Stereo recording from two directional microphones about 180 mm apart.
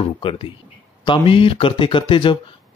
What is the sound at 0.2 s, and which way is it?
Speech, 30° left (ahead or behind).